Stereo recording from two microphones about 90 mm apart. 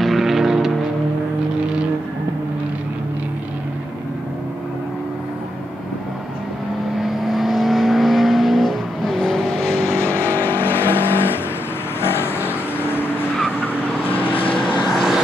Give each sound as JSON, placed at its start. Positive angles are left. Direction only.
{"t": 0.0, "sound": "vehicle", "side_deg": 0}
{"t": 7.0, "sound": "vehicle", "side_deg": 0}
{"t": 9.8, "sound": "vehicle", "side_deg": 20}
{"t": 14.8, "sound": "vehicle", "side_deg": -5}